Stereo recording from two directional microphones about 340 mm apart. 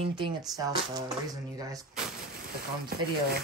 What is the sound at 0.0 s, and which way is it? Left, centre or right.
Speech, centre.